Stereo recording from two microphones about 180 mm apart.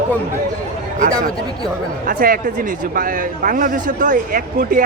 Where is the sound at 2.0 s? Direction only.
50° right (ahead or behind).